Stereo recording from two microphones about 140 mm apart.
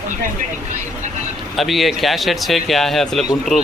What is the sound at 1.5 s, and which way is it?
Speech, centre (ahead or behind).